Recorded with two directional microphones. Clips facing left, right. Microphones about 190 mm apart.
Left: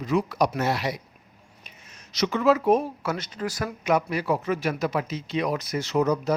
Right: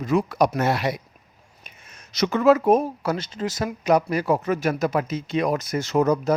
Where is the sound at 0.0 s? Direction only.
50° right (ahead or behind); by 3.8 s 20° right (ahead or behind).